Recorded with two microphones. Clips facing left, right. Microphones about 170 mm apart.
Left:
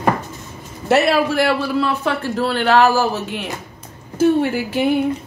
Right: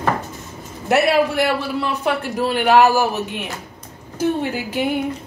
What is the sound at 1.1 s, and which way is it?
A man's voice, 20° right (ahead or behind).